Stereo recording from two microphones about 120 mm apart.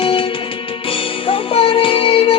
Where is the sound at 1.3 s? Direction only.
50° left (ahead or behind).